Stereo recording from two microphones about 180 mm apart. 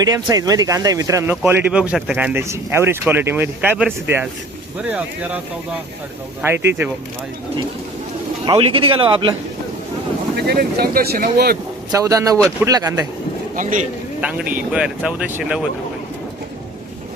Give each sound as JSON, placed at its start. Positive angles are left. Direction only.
{"t": 0.0, "sound": "speech", "side_deg": -20}
{"t": 8.4, "sound": "speech", "side_deg": -30}
{"t": 10.3, "sound": "speech", "side_deg": -60}
{"t": 11.9, "sound": "speech", "side_deg": -20}
{"t": 13.6, "sound": "a man's voice", "side_deg": -45}
{"t": 14.2, "sound": "speech", "side_deg": -5}